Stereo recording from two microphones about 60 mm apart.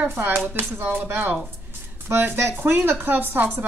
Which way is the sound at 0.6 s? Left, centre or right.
Right.